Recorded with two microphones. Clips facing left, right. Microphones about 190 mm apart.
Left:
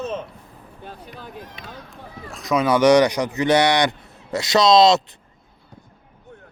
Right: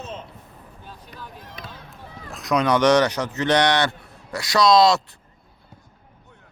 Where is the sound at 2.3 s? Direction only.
Centre (ahead or behind); by 5.0 s 20° left (ahead or behind).